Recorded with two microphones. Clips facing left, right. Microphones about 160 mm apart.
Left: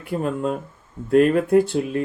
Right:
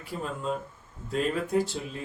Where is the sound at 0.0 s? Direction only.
60° left (ahead or behind).